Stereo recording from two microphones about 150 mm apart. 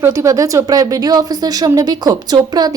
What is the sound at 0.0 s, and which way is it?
Speech, 20° right (ahead or behind).